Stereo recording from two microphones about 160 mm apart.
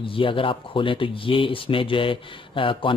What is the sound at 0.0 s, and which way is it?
Speech, 35° left (ahead or behind).